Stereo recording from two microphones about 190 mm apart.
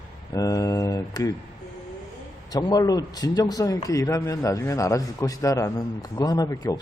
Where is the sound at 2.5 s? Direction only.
20° left (ahead or behind).